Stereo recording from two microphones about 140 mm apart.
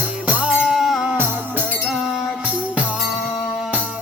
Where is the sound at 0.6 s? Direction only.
Centre (ahead or behind).